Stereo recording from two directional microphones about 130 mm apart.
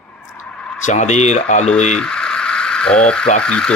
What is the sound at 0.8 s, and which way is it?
Speech, 65° left (ahead or behind).